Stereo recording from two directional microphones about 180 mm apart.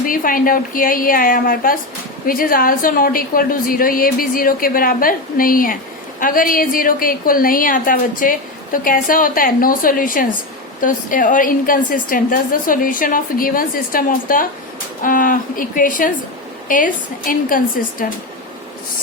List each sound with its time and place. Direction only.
0.0 s a woman's voice: 50° left (ahead or behind)